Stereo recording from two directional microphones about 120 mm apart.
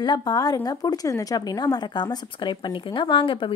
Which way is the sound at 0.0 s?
35° left (ahead or behind).